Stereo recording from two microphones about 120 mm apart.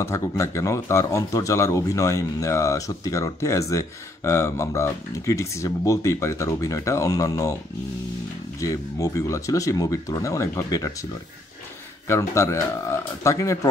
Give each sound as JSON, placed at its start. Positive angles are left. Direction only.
{"t": 0.0, "sound": "speech", "side_deg": 25}
{"t": 8.5, "sound": "speech", "side_deg": 25}
{"t": 12.1, "sound": "speech", "side_deg": 25}